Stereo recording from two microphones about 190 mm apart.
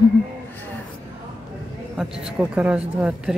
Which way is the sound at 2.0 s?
5° right (ahead or behind).